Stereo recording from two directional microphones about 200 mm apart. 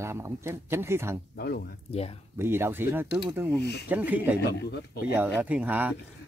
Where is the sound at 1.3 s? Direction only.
55° left (ahead or behind).